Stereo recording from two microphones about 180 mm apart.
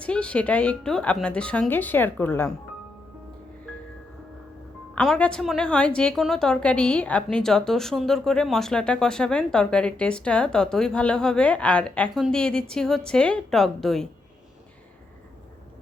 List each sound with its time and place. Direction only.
0.0 s speech: 5° left (ahead or behind)
4.9 s a woman's voice: 5° left (ahead or behind)